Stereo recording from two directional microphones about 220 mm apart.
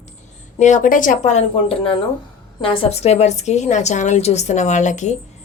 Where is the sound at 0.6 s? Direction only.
35° left (ahead or behind).